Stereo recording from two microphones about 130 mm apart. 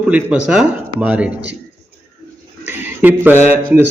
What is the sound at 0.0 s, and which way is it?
Speech, 10° right (ahead or behind).